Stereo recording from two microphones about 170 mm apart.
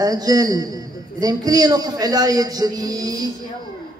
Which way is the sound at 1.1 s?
20° right (ahead or behind).